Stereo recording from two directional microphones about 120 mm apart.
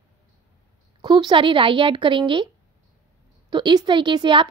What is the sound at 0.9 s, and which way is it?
A woman's voice, 40° right (ahead or behind).